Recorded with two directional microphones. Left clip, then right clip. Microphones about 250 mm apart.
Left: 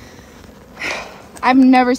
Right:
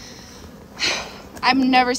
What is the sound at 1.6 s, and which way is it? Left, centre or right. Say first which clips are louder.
Speech: left 6 dB; centre.